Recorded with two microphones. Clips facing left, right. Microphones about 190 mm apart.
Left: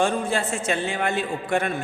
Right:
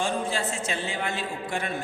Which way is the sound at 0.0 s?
55° left (ahead or behind).